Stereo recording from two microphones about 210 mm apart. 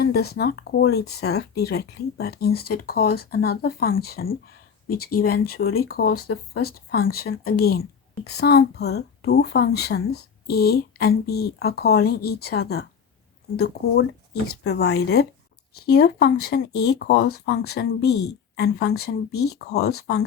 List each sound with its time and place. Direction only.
0.0 s speech: 50° left (ahead or behind)